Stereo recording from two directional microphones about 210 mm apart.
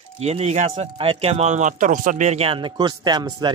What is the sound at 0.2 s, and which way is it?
Speech, 30° right (ahead or behind).